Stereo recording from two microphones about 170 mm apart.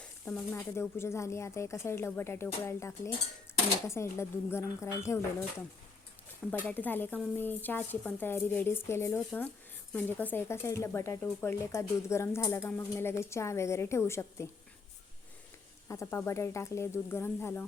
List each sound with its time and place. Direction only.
0.3 s speech: 15° left (ahead or behind)
15.9 s speech: 15° left (ahead or behind)